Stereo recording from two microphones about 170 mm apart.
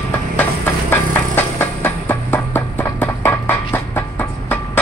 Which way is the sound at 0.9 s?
10° left (ahead or behind).